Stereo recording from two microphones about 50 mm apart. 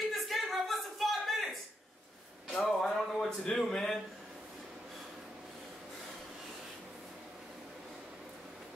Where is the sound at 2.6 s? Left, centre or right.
Centre.